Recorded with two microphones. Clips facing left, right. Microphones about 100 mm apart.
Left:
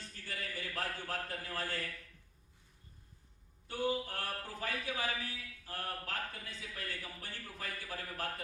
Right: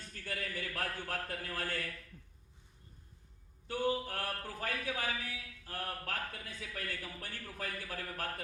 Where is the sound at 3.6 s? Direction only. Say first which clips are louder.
Right 2 dB; 50° right (ahead or behind).